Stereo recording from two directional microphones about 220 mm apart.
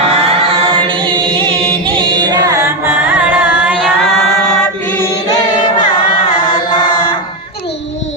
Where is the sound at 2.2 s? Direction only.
15° right (ahead or behind).